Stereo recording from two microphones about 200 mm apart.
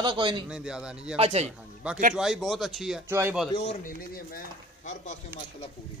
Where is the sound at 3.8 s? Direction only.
50° left (ahead or behind).